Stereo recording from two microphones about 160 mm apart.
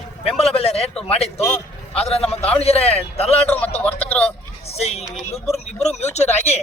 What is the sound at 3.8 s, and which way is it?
Speech, 10° left (ahead or behind).